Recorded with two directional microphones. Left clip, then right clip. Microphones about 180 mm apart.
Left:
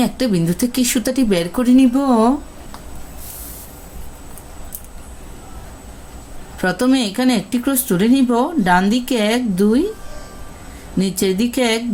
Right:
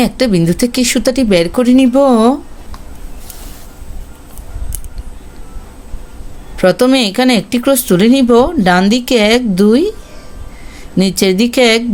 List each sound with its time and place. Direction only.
0.0 s speech: 45° right (ahead or behind)
6.6 s speech: 45° right (ahead or behind)
10.9 s speech: 50° right (ahead or behind)